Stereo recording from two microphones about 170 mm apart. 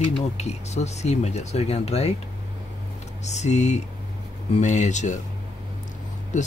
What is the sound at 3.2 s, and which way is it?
Speech, 40° left (ahead or behind).